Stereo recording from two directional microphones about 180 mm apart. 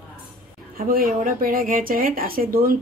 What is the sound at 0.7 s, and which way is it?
Speech, 55° right (ahead or behind).